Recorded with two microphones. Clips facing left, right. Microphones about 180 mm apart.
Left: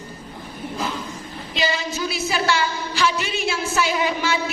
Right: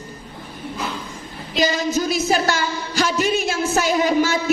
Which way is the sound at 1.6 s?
45° right (ahead or behind).